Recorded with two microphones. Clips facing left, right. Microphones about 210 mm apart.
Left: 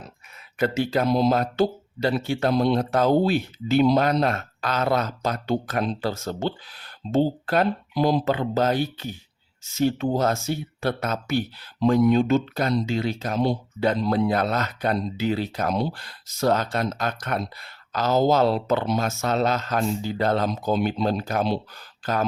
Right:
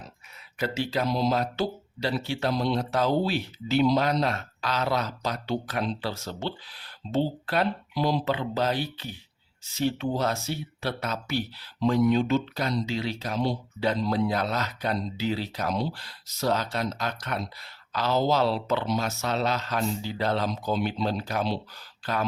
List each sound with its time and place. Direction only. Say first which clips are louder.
0.6 s speech: left 5 dB; 50° left (ahead or behind)